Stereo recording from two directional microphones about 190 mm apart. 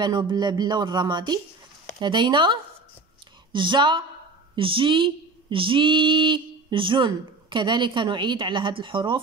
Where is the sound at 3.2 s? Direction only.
25° right (ahead or behind).